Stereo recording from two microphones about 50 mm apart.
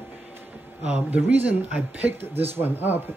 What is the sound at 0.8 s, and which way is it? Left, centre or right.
Speech, right.